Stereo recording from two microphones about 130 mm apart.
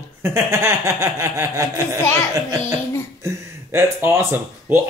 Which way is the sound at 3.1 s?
20° right (ahead or behind).